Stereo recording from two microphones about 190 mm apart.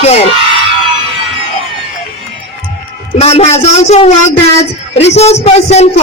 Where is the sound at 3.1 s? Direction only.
35° left (ahead or behind).